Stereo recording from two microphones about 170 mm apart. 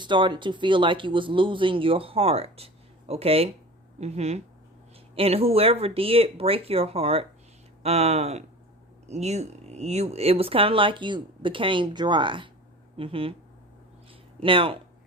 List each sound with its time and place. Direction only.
0.0 s speech: 25° right (ahead or behind)
14.4 s speech: 30° right (ahead or behind)